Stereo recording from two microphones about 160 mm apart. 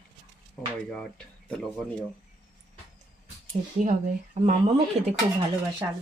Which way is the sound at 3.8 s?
55° right (ahead or behind).